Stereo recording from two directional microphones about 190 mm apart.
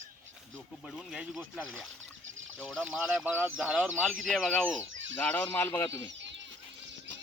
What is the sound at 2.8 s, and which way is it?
A man's voice, 10° right (ahead or behind).